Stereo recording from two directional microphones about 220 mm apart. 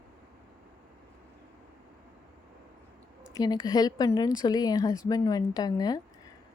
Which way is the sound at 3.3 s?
15° left (ahead or behind).